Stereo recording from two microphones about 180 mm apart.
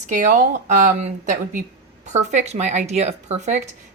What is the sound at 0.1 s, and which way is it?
A woman's voice, 45° right (ahead or behind).